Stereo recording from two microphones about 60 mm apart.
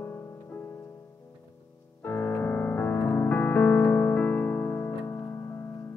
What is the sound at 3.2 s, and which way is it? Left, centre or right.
Music, left.